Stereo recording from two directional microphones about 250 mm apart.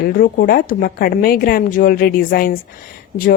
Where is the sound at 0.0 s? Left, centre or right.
Left.